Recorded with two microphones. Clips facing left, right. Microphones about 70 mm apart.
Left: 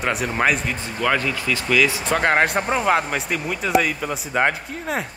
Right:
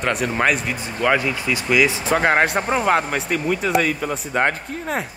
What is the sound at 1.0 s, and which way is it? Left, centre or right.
Speech, centre.